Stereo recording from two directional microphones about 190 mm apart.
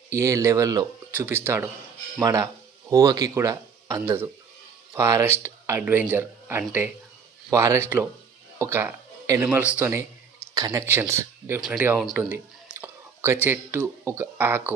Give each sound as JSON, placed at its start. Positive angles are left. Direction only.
{"t": 0.1, "sound": "speech", "side_deg": -15}